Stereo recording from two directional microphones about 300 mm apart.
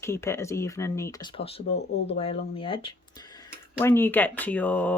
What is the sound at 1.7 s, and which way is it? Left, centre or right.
Speech, left.